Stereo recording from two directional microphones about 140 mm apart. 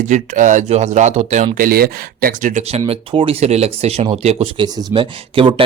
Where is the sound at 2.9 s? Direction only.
45° right (ahead or behind).